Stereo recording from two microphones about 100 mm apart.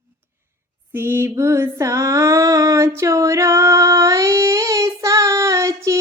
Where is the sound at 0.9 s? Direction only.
20° right (ahead or behind).